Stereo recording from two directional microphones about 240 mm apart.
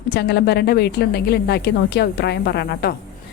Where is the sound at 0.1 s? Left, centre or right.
Left.